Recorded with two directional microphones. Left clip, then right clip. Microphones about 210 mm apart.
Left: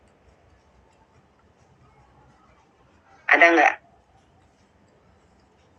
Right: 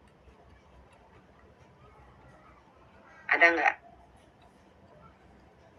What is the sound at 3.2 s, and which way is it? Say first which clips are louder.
Speech: left 8 dB; 45° left (ahead or behind).